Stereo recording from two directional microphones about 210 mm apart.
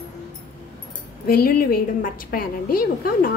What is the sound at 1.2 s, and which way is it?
A woman's voice, 45° left (ahead or behind).